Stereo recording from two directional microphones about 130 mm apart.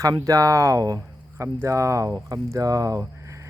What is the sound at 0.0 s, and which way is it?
Speech, 25° right (ahead or behind).